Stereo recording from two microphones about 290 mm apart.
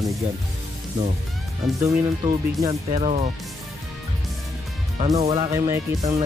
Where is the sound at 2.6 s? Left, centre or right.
Centre.